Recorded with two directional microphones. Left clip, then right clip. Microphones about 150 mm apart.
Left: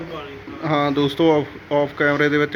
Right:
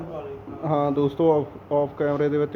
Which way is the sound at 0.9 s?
45° left (ahead or behind).